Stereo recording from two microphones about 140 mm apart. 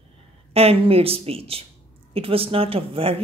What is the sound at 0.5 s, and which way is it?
Speech, 45° right (ahead or behind).